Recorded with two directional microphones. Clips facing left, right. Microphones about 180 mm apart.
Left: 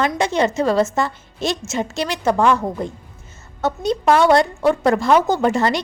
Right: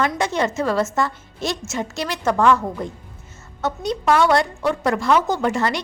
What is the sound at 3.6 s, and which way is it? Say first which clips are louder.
A woman's voice: left 3 dB; 25° left (ahead or behind).